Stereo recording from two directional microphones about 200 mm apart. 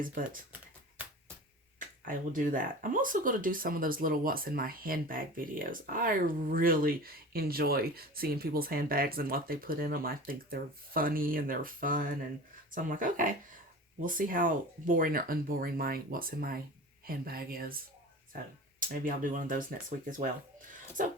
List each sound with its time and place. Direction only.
2.0 s speech: 40° right (ahead or behind)
18.8 s speech: 45° right (ahead or behind)